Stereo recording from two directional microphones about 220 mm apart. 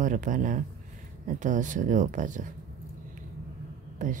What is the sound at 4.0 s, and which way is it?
Speech, 35° right (ahead or behind).